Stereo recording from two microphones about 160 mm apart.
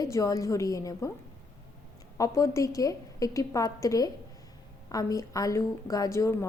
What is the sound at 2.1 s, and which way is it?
A woman's voice, 20° left (ahead or behind).